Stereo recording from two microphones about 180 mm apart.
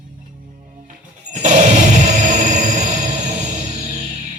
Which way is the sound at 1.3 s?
40° right (ahead or behind).